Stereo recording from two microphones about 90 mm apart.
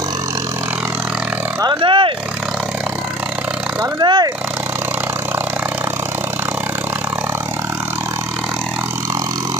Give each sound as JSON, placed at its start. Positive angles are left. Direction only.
{"t": 1.6, "sound": "vehicle", "side_deg": -60}
{"t": 4.0, "sound": "speech", "side_deg": -55}